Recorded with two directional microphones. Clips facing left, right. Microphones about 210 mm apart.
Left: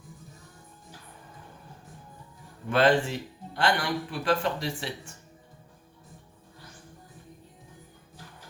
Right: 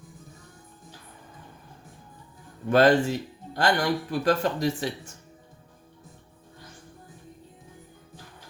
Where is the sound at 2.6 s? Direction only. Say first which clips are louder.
Right 4 dB; 40° right (ahead or behind).